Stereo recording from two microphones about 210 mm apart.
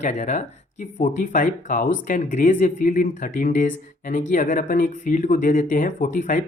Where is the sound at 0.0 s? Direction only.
35° left (ahead or behind).